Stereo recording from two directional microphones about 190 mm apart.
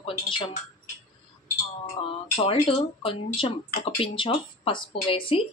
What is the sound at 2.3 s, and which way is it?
Speech, 30° left (ahead or behind).